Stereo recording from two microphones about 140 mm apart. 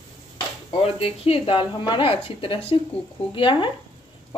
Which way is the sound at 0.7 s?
45° left (ahead or behind).